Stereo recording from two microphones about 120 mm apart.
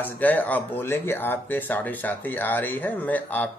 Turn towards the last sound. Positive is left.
turn(degrees=15)  # may be behind; listen again after turning